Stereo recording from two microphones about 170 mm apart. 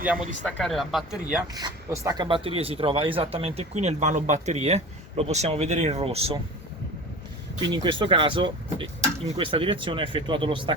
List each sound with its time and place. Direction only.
0.0 s speech: 10° right (ahead or behind)
0.4 s speech: 5° left (ahead or behind)
1.5 s speech: 20° right (ahead or behind)
7.7 s speech: 30° right (ahead or behind)